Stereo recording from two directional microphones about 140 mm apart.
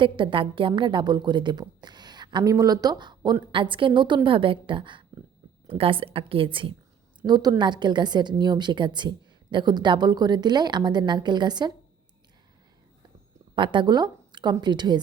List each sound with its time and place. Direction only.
0.0 s a woman's voice: 35° right (ahead or behind)
13.6 s a woman's voice: 35° right (ahead or behind)